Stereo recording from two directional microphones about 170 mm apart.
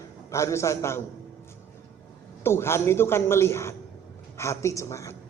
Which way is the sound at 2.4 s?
15° left (ahead or behind).